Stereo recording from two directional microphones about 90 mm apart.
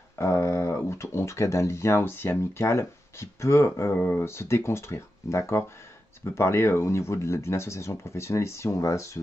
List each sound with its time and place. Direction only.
0.2 s speech: 30° left (ahead or behind)